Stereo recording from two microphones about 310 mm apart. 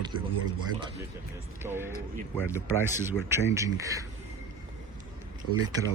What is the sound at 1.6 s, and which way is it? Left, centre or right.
Speech, centre.